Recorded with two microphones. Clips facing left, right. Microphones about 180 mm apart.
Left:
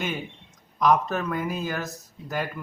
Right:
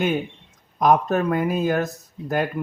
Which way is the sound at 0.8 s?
55° right (ahead or behind).